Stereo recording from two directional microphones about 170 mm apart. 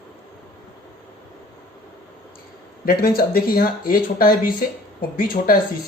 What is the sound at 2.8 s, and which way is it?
Speech, 60° left (ahead or behind).